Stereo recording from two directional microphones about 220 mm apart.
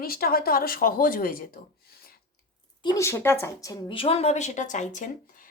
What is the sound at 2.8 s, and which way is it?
A woman's voice, 15° left (ahead or behind).